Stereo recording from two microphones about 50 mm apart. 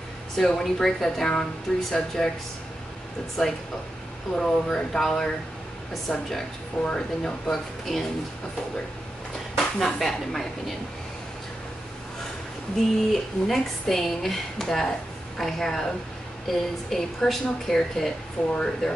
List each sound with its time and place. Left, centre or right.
0.4 s speech: centre
3.4 s speech: centre
7.5 s speech: centre
9.8 s speech: centre
12.7 s speech: centre